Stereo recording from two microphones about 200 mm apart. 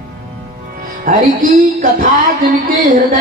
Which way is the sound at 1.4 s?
45° right (ahead or behind).